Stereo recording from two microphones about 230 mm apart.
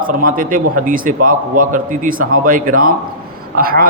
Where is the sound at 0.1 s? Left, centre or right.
Right.